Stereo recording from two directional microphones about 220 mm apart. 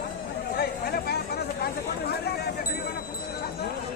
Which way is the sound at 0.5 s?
45° left (ahead or behind).